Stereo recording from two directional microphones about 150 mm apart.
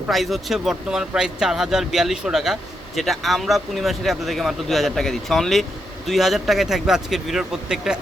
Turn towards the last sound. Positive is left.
turn(degrees=-5)  # may be behind; listen again after turning